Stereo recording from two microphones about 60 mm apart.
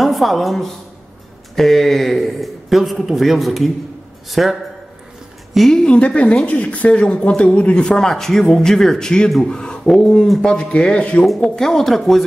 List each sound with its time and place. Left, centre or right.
0.0 s a woman's voice: centre
5.7 s speech: centre
5.9 s speech: left
10.5 s speech: centre
11.2 s speech: centre